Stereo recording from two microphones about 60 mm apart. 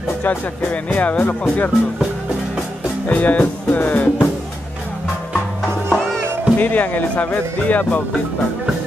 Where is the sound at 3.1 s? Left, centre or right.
Left.